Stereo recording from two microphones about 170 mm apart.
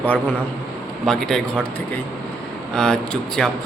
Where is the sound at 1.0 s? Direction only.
5° left (ahead or behind).